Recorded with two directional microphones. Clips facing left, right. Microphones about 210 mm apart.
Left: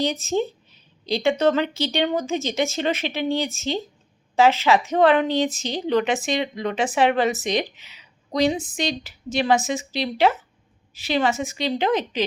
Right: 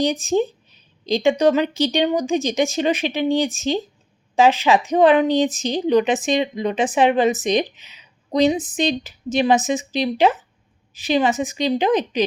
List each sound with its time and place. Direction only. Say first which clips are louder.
0.0 s a woman's voice: right 4 dB; 15° right (ahead or behind)